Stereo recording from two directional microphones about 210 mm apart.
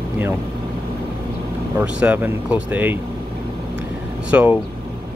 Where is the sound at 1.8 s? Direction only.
5° right (ahead or behind).